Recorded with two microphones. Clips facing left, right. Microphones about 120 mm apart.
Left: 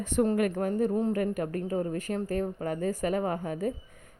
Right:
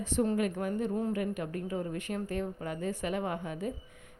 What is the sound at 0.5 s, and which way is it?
A woman's voice, 40° left (ahead or behind).